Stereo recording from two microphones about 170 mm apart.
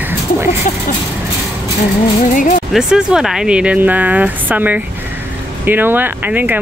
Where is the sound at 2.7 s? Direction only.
5° right (ahead or behind).